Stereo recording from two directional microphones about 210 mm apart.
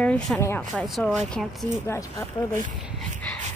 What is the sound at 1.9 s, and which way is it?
Speech, 15° left (ahead or behind).